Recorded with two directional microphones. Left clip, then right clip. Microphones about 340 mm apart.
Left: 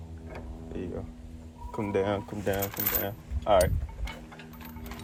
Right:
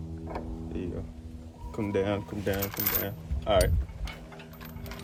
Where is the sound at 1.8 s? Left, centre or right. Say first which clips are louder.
Left 1 dB; centre.